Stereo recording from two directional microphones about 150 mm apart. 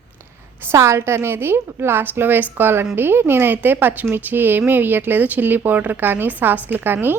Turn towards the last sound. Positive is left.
turn(degrees=-15)  # may be behind; listen again after turning